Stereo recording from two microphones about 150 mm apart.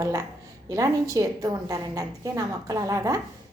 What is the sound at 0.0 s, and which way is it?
A woman's voice, 20° right (ahead or behind).